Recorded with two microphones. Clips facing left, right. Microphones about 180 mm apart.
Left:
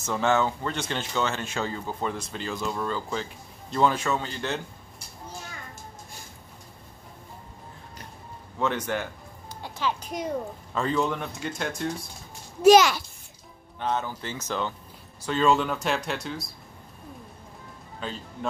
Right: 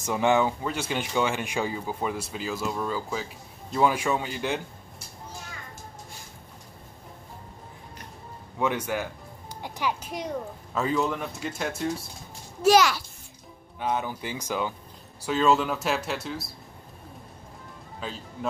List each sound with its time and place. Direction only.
0.0 s speech: 15° right (ahead or behind)
8.5 s speech: 10° right (ahead or behind)
9.6 s a sound: 15° right (ahead or behind)
10.0 s a child's voice: centre (ahead or behind)
12.6 s a child's voice: 20° left (ahead or behind)
13.7 s a child's voice: 10° right (ahead or behind)
18.0 s a child's voice: 5° right (ahead or behind)